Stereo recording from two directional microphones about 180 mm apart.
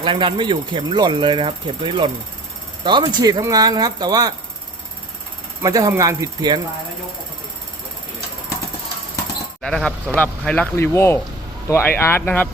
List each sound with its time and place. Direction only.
0.0 s speech: 25° right (ahead or behind)
5.6 s speech: 20° right (ahead or behind)
9.6 s speech: 5° left (ahead or behind)